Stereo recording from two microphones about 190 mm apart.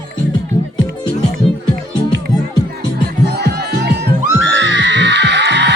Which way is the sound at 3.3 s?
60° right (ahead or behind).